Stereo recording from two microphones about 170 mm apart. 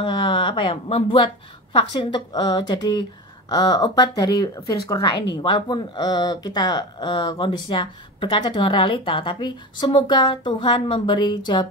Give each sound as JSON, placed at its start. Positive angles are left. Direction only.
{"t": 0.0, "sound": "a woman's voice", "side_deg": 30}